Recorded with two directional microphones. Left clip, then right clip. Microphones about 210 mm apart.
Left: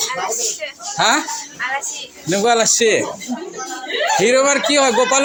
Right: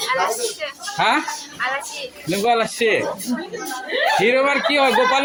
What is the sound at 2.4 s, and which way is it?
Speech, 20° left (ahead or behind).